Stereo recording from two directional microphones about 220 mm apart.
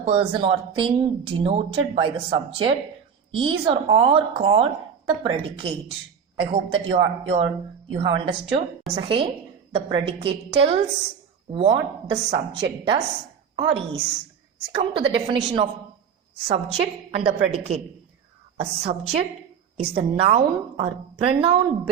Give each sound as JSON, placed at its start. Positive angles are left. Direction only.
{"t": 0.0, "sound": "speech", "side_deg": -25}
{"t": 13.6, "sound": "speech", "side_deg": -25}